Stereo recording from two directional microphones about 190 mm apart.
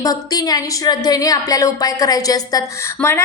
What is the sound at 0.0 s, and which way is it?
A woman's voice, 20° left (ahead or behind).